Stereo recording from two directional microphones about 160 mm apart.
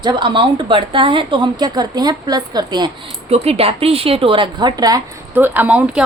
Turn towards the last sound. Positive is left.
turn(degrees=-10)  # may be behind; listen again after turning